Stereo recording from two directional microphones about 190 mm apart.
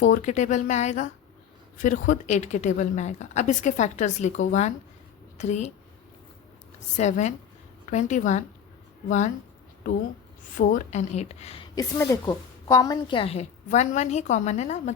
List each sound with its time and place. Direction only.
0.0 s a woman's voice: 40° left (ahead or behind)
6.9 s a woman's voice: 40° left (ahead or behind)
10.6 s a woman's voice: 40° left (ahead or behind)
11.7 s a woman's voice: 20° left (ahead or behind); by 14.9 s 35° left (ahead or behind)